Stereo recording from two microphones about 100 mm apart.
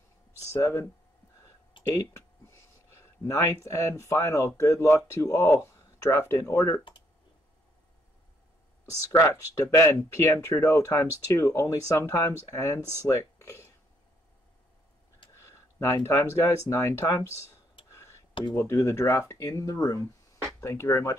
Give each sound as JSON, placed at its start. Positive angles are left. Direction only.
{"t": 0.5, "sound": "speech", "side_deg": 30}
{"t": 1.9, "sound": "speech", "side_deg": 30}
{"t": 9.2, "sound": "speech", "side_deg": 30}
{"t": 13.0, "sound": "a sound", "side_deg": 30}
{"t": 15.3, "sound": "speech", "side_deg": 30}
{"t": 17.8, "sound": "tick-tock", "side_deg": 30}
{"t": 18.5, "sound": "speech", "side_deg": 25}